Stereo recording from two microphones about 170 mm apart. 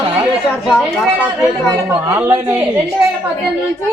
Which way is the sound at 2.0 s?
15° right (ahead or behind).